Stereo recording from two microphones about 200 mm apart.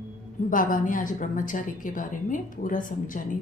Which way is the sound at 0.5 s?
40° left (ahead or behind).